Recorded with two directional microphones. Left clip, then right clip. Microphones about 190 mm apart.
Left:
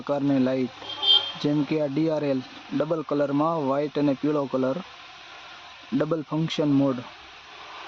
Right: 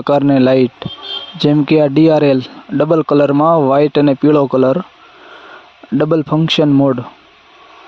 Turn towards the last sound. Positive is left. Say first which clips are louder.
# right 12 dB
turn(degrees=-45)  # may be behind; listen again after turning